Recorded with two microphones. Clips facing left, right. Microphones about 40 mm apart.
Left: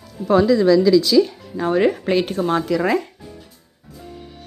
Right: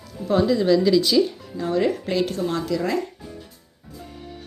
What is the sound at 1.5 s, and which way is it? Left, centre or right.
Speech, left.